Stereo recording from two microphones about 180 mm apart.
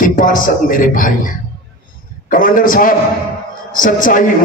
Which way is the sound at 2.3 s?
50° left (ahead or behind).